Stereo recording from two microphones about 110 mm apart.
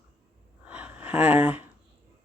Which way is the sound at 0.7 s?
15° right (ahead or behind).